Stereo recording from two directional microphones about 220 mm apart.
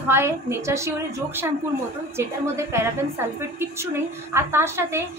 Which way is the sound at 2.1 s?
10° right (ahead or behind).